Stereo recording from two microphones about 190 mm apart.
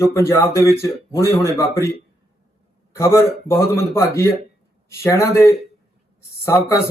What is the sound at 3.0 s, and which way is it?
Speech, 15° left (ahead or behind).